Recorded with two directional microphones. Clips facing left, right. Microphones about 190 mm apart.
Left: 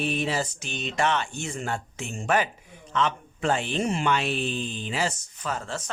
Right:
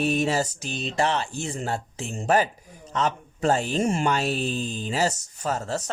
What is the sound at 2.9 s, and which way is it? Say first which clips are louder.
Speech: even; 40° right (ahead or behind).